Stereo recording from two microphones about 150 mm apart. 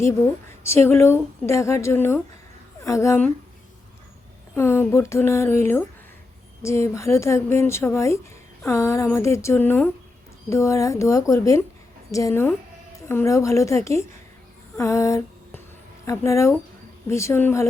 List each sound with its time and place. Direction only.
0.0 s a woman's voice: 15° left (ahead or behind)
4.5 s a woman's voice: 15° left (ahead or behind)
14.8 s a sound: 20° left (ahead or behind)
16.0 s a woman's voice: 20° left (ahead or behind)